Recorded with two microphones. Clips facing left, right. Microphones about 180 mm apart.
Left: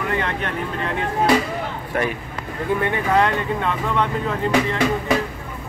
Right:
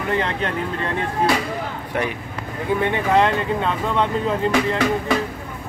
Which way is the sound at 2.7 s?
25° right (ahead or behind).